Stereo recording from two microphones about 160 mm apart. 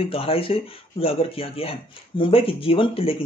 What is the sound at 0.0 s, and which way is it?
Speech, 35° left (ahead or behind).